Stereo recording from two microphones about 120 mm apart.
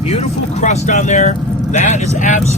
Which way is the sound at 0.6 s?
85° left.